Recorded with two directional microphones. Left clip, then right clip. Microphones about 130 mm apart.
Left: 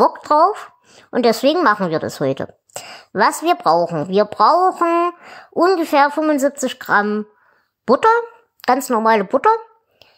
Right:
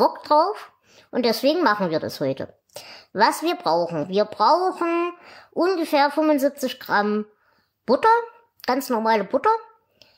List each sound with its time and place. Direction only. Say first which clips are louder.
0.0 s a woman's voice: left 5 dB; 30° left (ahead or behind)